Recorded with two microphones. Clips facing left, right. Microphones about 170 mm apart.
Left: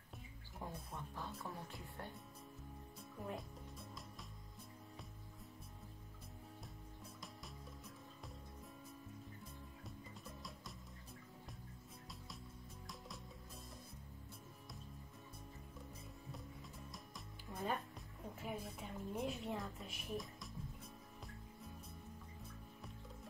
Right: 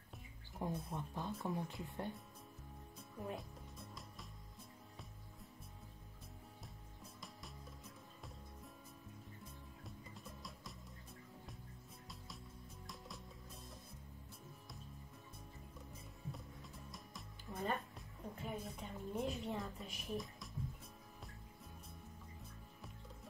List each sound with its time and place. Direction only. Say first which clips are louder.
0.6 s speech: right 6 dB; 15° right (ahead or behind)
3.2 s speech: right 1 dB; centre (ahead or behind)
9.4 s music: left 1 dB; centre (ahead or behind)
16.9 s music: even; centre (ahead or behind)